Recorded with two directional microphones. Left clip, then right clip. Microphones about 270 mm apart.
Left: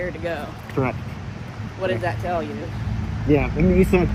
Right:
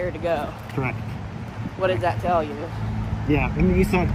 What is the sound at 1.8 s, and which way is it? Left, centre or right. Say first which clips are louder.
Speech: right 2 dB; centre.